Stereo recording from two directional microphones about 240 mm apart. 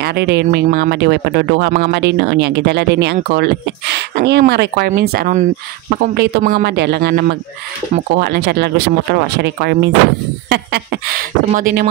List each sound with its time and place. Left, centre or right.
0.0 s speech: right